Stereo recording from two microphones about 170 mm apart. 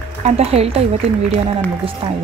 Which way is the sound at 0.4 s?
35° right (ahead or behind).